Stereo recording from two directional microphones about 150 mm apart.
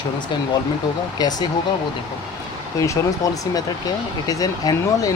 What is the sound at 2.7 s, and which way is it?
Speech, 20° left (ahead or behind).